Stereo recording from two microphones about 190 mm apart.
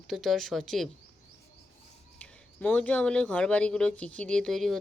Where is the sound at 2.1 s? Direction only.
5° left (ahead or behind).